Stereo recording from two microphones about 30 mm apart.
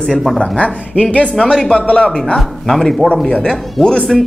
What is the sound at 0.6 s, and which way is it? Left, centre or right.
Speech, left.